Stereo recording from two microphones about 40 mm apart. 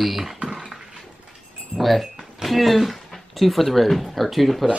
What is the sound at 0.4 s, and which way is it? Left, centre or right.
Beatboxing, right.